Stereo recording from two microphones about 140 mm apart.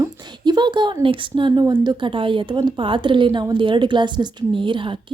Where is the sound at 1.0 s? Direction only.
40° right (ahead or behind).